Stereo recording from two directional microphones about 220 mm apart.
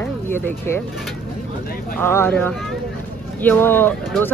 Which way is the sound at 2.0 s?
10° left (ahead or behind).